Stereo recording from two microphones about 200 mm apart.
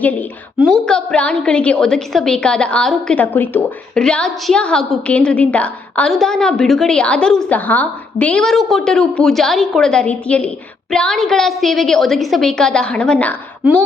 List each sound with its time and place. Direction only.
0.0 s a woman's voice: 10° left (ahead or behind)